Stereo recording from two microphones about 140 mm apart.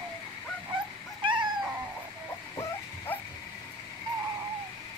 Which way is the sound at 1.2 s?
35° right (ahead or behind).